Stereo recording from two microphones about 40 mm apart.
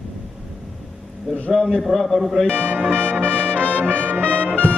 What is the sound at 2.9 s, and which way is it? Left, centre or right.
Brass instrument, right.